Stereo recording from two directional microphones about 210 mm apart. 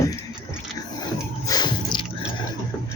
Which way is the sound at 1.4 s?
20° left (ahead or behind).